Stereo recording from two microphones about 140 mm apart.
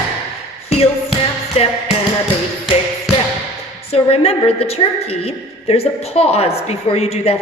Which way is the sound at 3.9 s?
45° left (ahead or behind).